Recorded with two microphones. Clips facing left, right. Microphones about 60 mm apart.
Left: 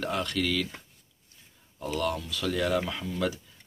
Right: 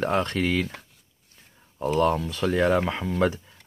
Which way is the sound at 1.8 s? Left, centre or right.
Right.